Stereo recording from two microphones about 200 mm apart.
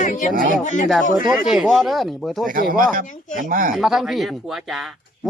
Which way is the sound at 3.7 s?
Centre (ahead or behind).